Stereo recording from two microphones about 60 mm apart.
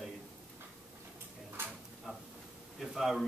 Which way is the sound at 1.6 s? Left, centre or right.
Right.